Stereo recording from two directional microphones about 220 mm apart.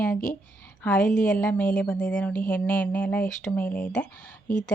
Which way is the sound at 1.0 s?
35° left (ahead or behind).